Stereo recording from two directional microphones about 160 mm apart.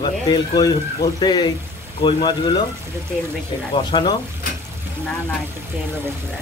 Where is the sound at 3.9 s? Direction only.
30° left (ahead or behind).